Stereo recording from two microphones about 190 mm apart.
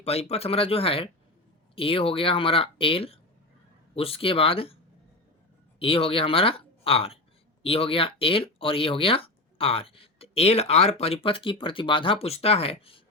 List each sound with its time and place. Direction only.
0.0 s speech: 35° left (ahead or behind)
5.8 s speech: 30° left (ahead or behind)